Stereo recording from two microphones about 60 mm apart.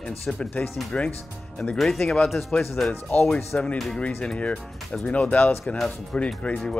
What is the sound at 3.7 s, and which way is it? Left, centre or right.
Speech, centre.